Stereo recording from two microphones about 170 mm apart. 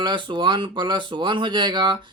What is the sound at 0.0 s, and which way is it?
Speech, 30° right (ahead or behind).